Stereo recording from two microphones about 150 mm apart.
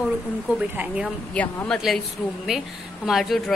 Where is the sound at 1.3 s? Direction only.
10° left (ahead or behind).